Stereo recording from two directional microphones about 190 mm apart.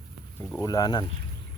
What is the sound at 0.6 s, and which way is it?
Speech, 20° left (ahead or behind).